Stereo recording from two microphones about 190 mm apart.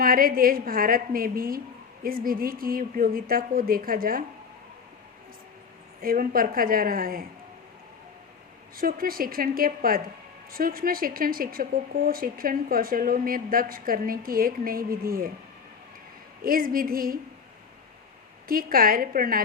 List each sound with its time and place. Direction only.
0.0 s speech: 50° right (ahead or behind)
6.0 s speech: 50° right (ahead or behind)
8.7 s speech: 50° right (ahead or behind)
16.4 s speech: 50° right (ahead or behind)
18.4 s speech: 50° right (ahead or behind)